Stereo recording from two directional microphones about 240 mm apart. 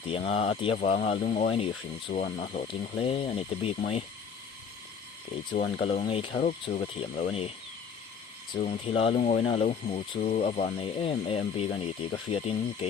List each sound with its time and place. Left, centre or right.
0.3 s speech: left
5.5 s speech: left
8.5 s speech: left